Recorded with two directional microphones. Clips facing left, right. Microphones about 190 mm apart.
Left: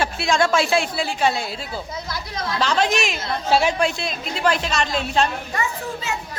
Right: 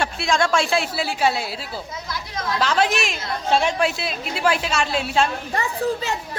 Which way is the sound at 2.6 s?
5° right (ahead or behind).